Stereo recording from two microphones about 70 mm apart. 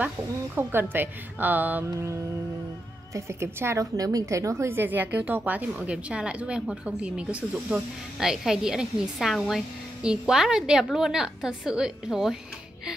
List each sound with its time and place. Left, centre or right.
0.6 s a woman's voice: right
1.9 s mantra: right
3.2 s a woman's voice: right
3.9 s a woman's voice: right; by 7.4 s centre
8.2 s a woman's voice: centre